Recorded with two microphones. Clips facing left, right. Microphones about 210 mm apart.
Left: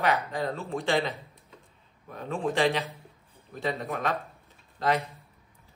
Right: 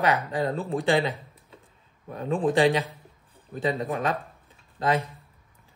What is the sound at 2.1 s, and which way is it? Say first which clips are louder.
Speech: right 5 dB; 35° right (ahead or behind).